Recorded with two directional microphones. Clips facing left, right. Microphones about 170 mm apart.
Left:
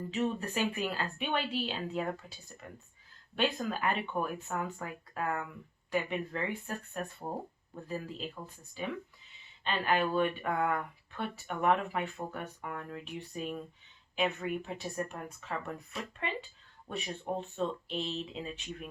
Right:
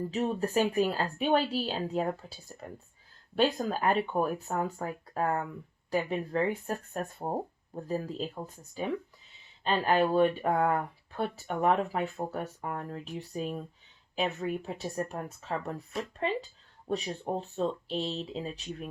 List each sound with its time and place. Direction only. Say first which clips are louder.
0.1 s speech: right 2 dB; 40° right (ahead or behind)